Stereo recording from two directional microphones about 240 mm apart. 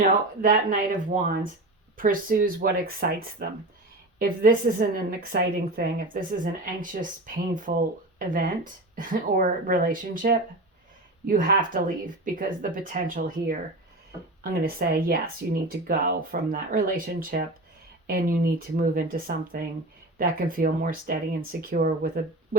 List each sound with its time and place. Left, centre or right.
0.0 s a woman's voice: right